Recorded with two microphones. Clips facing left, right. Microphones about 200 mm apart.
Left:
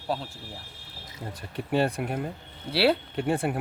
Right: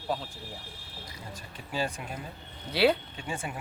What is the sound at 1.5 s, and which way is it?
Speech, 60° left (ahead or behind).